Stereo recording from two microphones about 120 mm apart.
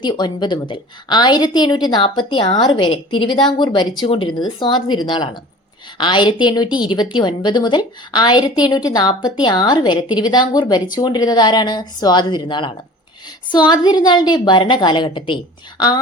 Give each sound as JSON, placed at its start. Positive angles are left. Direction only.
{"t": 0.0, "sound": "a woman's voice", "side_deg": 35}